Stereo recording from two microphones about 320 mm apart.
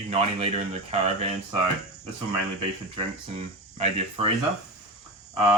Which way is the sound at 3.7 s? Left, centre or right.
Centre.